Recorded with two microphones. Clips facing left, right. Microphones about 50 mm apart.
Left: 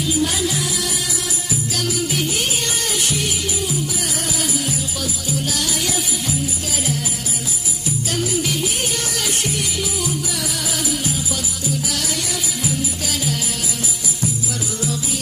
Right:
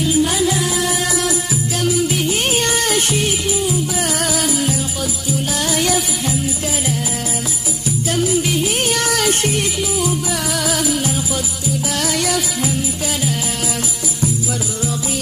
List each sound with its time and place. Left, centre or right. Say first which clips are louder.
0.2 s music: right 5 dB; centre
0.6 s music: right 5 dB; right
1.8 s music: right 5 dB; centre
2.3 s music: right 5 dB; right
4.2 s music: right 5 dB; right
8.8 s music: right 7 dB; right
12.0 s music: right 6 dB; right